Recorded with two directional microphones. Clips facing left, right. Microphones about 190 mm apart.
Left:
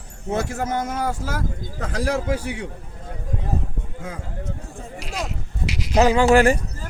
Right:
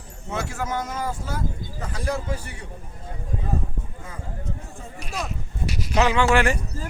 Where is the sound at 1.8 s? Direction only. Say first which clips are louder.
Left 5 dB; 90° left.